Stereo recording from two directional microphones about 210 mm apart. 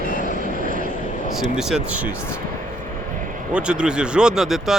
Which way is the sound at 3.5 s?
5° right (ahead or behind).